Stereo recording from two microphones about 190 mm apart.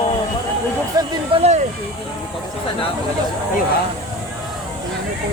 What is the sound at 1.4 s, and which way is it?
Speech, 35° right (ahead or behind).